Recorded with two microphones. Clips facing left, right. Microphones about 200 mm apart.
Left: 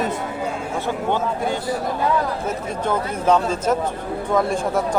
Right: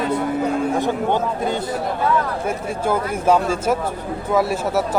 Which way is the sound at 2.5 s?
10° right (ahead or behind).